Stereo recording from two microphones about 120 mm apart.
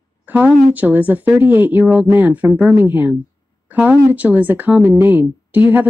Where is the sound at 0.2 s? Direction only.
15° right (ahead or behind).